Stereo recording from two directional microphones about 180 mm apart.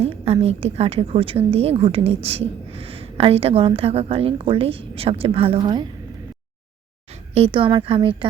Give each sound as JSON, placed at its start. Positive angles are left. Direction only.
{"t": 0.0, "sound": "a woman's voice", "side_deg": -35}
{"t": 7.1, "sound": "speech", "side_deg": -35}